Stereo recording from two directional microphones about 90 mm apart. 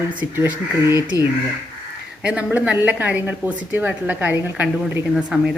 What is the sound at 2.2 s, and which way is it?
Speech, 10° right (ahead or behind).